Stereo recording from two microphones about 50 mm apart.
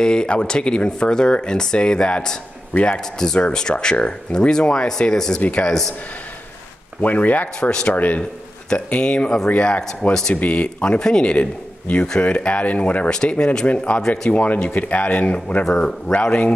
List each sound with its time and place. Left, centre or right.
0.0 s speech: centre
5.4 s speech: left
7.0 s speech: left
8.6 s speech: centre
10.3 s speech: left
13.1 s speech: centre
13.7 s speech: left